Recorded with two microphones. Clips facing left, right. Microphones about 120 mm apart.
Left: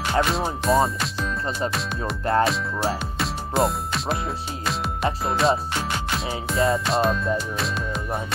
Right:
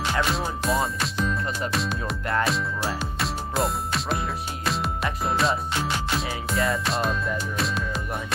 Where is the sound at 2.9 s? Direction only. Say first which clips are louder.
Left 2 dB; centre (ahead or behind).